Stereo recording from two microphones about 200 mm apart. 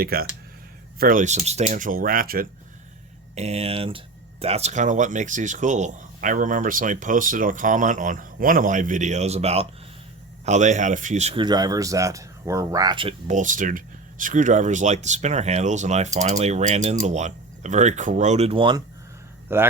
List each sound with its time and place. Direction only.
0.0 s speech: 50° right (ahead or behind)
3.3 s speech: 30° right (ahead or behind)
11.4 s speech: 20° right (ahead or behind)
19.5 s speech: 10° right (ahead or behind)